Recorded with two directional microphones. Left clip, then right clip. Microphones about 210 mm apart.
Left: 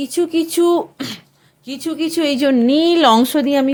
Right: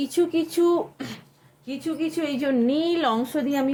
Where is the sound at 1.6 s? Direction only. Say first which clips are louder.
Left 6 dB; 55° left (ahead or behind).